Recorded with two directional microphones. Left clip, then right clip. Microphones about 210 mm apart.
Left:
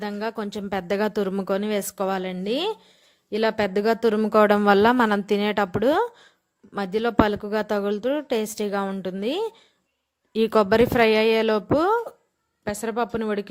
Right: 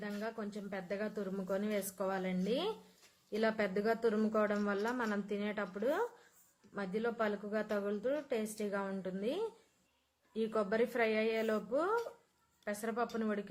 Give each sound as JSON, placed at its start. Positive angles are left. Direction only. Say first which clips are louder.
{"t": 0.0, "sound": "a woman's voice", "louder": "left 13 dB", "side_deg": 45}